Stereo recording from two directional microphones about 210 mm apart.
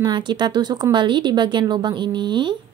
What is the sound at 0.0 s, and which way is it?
Speech, 20° right (ahead or behind).